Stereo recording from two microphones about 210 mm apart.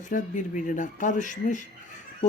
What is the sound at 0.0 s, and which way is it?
Speech, 35° left (ahead or behind).